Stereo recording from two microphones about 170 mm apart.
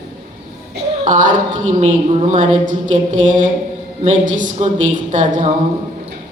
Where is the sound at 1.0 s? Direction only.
50° right (ahead or behind).